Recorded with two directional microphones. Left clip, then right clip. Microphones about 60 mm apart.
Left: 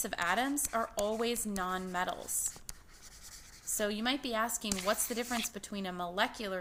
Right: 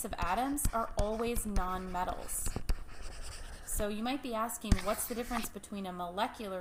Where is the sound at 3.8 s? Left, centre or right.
Centre.